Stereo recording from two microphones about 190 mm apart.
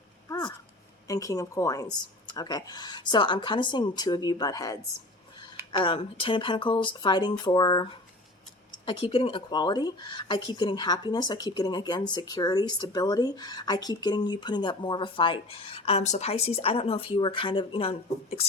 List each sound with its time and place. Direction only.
0.3 s a sound: 20° left (ahead or behind)
1.0 s speech: 20° left (ahead or behind)
8.9 s speech: 25° left (ahead or behind)